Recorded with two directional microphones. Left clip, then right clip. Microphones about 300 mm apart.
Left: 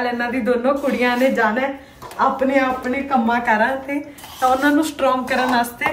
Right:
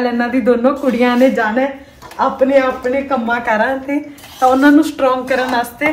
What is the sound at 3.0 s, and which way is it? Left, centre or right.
A woman's voice, centre.